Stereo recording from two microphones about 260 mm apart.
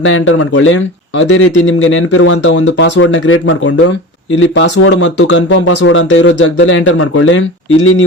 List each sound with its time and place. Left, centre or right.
0.0 s speech: left